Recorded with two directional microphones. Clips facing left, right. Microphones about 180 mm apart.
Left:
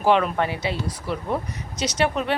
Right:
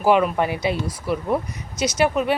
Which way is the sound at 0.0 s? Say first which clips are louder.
Right 2 dB; 10° right (ahead or behind).